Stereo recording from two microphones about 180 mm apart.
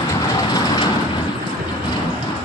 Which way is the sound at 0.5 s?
20° left (ahead or behind).